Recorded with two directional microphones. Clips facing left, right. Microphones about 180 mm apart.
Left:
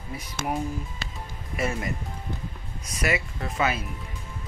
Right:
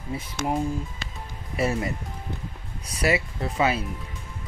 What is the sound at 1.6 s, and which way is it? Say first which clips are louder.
Speech: right 4 dB; 30° right (ahead or behind).